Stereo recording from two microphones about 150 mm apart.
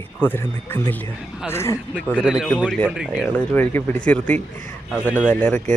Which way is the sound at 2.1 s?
5° right (ahead or behind).